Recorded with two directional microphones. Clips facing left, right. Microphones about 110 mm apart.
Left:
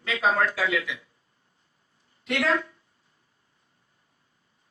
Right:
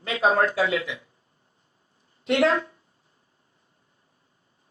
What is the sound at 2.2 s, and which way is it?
Speech, 30° right (ahead or behind).